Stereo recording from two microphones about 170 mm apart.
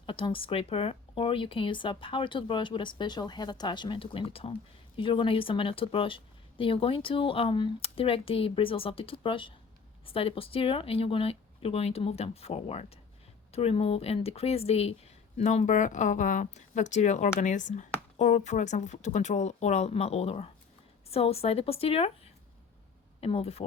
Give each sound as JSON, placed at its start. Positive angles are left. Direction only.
{"t": 0.0, "sound": "speech", "side_deg": 30}